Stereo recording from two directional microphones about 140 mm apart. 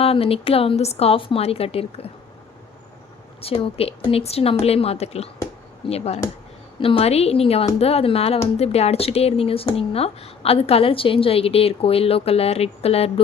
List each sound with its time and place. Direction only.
0.0 s a woman's voice: 45° left (ahead or behind)
3.4 s a woman's voice: 40° left (ahead or behind)